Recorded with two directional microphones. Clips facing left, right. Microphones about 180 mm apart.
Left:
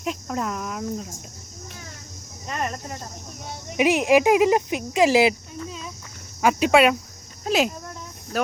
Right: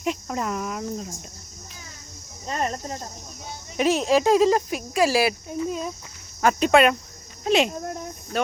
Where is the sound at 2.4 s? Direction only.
30° right (ahead or behind).